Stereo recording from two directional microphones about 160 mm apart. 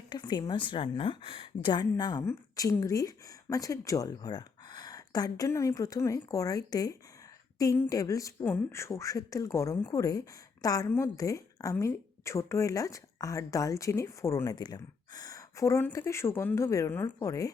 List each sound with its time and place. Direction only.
0.1 s a woman's voice: 30° left (ahead or behind)